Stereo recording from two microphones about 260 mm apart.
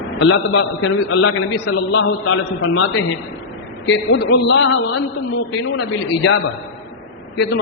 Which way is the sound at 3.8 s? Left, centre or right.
Left.